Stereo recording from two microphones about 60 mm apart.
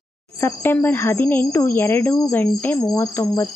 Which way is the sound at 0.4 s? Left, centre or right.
Left.